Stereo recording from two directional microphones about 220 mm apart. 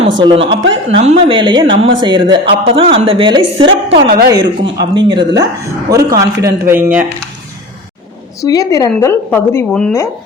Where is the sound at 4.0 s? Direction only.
45° right (ahead or behind).